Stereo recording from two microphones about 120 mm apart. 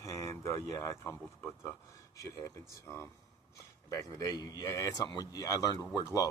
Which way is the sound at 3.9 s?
30° left (ahead or behind).